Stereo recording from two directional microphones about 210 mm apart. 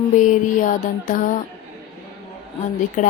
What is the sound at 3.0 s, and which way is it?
Speech, 40° left (ahead or behind).